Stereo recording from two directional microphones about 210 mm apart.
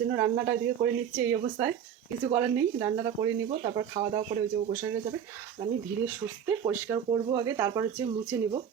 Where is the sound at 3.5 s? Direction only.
30° right (ahead or behind).